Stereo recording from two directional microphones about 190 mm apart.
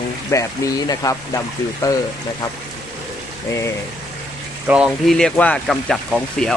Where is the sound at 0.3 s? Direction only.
15° left (ahead or behind).